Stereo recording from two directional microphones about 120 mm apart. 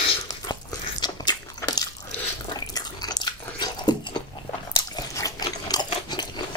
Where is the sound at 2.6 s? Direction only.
35° left (ahead or behind).